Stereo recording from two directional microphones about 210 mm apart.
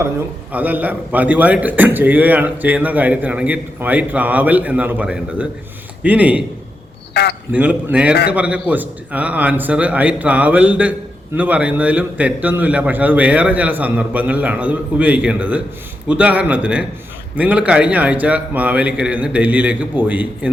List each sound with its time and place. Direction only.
0.5 s a man's voice: 10° right (ahead or behind)
7.1 s a sound: 50° left (ahead or behind)
7.5 s a man's voice: 5° right (ahead or behind)